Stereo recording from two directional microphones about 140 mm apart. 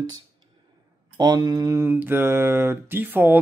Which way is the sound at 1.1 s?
30° right (ahead or behind).